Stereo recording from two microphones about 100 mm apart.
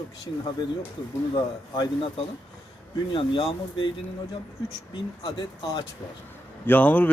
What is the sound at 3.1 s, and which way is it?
Speech, 55° left (ahead or behind).